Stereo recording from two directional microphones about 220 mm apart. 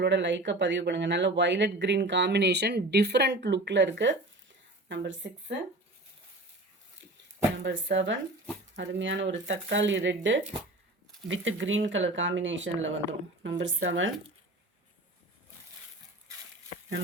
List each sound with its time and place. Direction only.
0.0 s speech: 55° right (ahead or behind)
7.6 s speech: 55° right (ahead or behind)